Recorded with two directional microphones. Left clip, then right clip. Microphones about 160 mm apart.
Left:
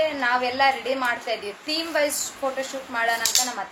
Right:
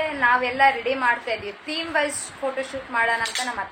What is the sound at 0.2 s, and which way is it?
A woman's voice, centre (ahead or behind).